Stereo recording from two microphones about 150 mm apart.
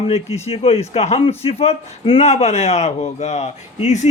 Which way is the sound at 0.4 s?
40° left (ahead or behind).